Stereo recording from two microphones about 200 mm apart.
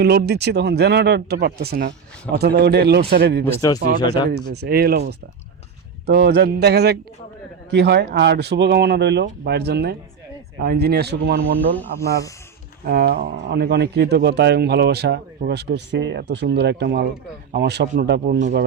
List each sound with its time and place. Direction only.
0.0 s a man's voice: 55° right (ahead or behind)
3.4 s speech: 15° left (ahead or behind)
4.3 s a man's voice: 55° right (ahead or behind)
12.8 s a man's voice: 50° right (ahead or behind)